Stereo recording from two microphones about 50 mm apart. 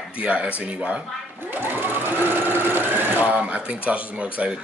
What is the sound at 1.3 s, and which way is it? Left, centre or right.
Sewing machine, right.